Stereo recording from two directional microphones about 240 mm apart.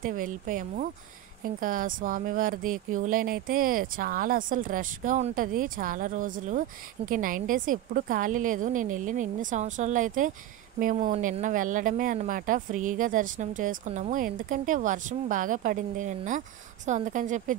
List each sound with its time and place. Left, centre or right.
0.0 s speech: right